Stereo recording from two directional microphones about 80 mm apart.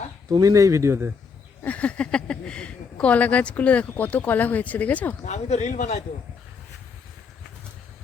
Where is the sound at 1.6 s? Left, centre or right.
Centre.